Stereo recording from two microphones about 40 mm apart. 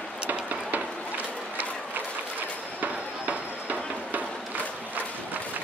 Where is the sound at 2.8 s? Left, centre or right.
Right.